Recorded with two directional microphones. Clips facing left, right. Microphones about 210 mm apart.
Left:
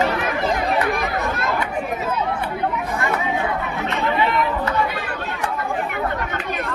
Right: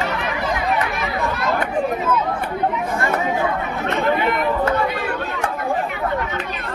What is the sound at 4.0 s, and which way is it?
Chatter, 50° right (ahead or behind).